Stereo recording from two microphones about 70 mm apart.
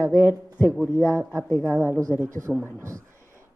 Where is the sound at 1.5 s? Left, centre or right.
Left.